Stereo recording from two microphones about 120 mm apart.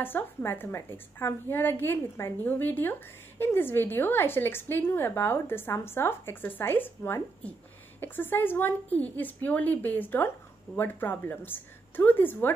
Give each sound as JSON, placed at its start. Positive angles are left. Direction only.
{"t": 0.0, "sound": "a woman's voice", "side_deg": 20}